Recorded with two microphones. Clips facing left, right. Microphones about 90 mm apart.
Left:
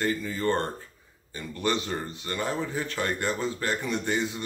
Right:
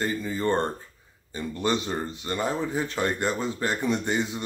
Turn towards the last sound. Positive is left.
turn(degrees=-20)  # may be behind; listen again after turning